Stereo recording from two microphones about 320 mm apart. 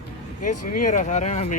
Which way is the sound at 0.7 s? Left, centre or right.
Left.